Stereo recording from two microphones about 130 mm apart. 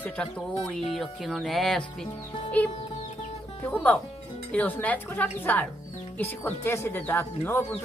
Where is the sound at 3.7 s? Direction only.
15° left (ahead or behind).